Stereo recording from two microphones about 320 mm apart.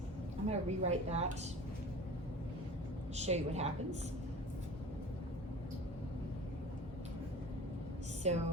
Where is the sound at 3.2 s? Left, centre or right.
Centre.